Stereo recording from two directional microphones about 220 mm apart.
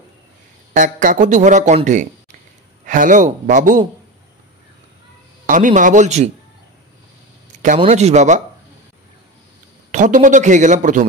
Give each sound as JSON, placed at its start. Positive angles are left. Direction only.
{"t": 0.7, "sound": "speech", "side_deg": -35}
{"t": 5.5, "sound": "speech", "side_deg": -35}
{"t": 7.6, "sound": "speech", "side_deg": -30}
{"t": 9.8, "sound": "speech", "side_deg": -35}